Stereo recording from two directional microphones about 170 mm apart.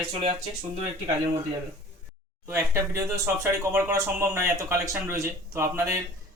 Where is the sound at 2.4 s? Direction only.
15° right (ahead or behind).